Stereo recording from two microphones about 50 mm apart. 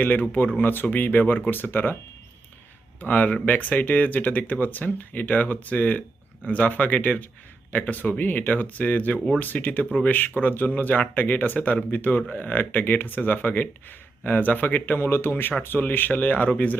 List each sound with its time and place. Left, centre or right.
0.0 s speech: left
3.0 s speech: left